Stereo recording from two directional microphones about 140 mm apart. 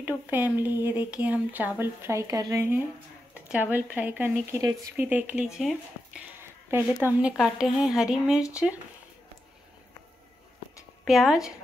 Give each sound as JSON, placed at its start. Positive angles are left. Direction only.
{"t": 0.0, "sound": "speech", "side_deg": -15}
{"t": 6.7, "sound": "speech", "side_deg": -15}
{"t": 11.1, "sound": "speech", "side_deg": 0}